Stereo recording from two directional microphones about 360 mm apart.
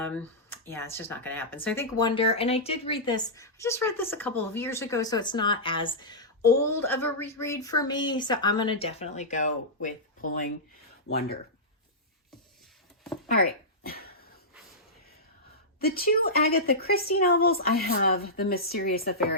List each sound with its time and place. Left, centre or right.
0.0 s speech: centre
13.3 s a sound: left
15.8 s speech: left